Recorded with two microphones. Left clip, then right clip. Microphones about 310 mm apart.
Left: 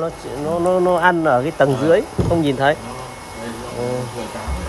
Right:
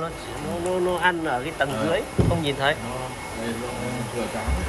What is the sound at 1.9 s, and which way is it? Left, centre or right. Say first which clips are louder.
Speech: left 8 dB; left.